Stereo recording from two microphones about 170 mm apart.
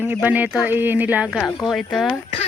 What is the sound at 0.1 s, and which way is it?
A woman's voice, 10° right (ahead or behind).